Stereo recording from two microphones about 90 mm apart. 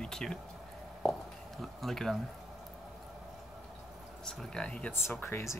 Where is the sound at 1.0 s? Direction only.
5° left (ahead or behind).